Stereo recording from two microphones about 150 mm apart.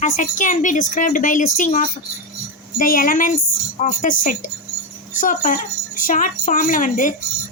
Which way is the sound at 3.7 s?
55° left (ahead or behind).